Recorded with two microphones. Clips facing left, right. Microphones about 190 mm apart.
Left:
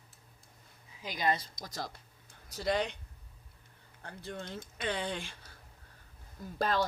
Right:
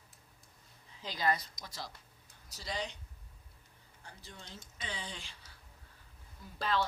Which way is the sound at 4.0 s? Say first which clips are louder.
Left 11 dB; 60° left (ahead or behind).